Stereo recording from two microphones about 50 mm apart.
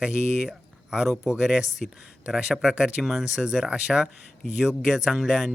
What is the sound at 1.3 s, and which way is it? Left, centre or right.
Speech, centre.